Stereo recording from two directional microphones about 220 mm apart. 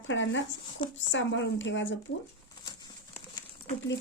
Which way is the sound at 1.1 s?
55° left (ahead or behind).